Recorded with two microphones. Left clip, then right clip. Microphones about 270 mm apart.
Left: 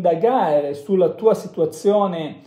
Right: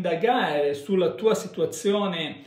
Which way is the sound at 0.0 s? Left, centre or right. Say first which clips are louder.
Left 6 dB; centre.